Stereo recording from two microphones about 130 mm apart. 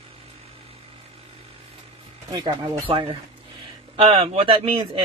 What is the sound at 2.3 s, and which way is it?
Speech, 35° right (ahead or behind).